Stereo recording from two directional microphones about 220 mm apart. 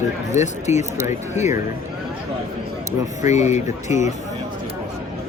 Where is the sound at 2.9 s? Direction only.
30° left (ahead or behind).